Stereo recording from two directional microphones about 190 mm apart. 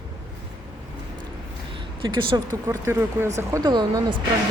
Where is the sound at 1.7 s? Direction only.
25° right (ahead or behind).